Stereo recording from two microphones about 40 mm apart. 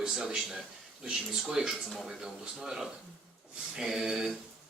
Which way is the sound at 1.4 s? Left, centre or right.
Centre.